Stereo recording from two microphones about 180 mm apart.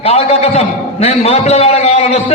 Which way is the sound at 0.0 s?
35° left (ahead or behind).